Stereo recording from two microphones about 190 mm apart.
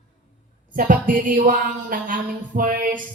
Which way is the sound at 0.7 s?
45° right (ahead or behind).